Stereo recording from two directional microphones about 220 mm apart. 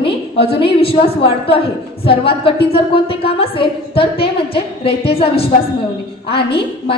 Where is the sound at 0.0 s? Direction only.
25° left (ahead or behind).